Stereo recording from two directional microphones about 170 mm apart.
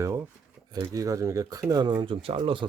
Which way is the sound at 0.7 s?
20° right (ahead or behind).